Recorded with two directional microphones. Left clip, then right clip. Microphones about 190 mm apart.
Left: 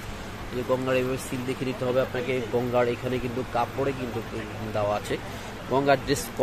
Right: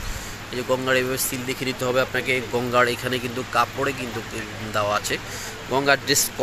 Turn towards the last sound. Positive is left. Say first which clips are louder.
# right 3 dB
turn(degrees=5)  # may be behind; listen again after turning